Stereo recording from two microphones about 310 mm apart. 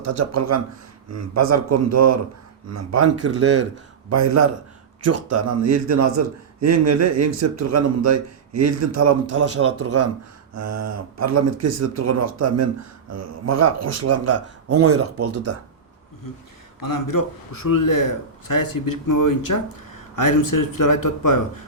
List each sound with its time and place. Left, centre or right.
0.0 s a man's voice: right
16.8 s a man's voice: left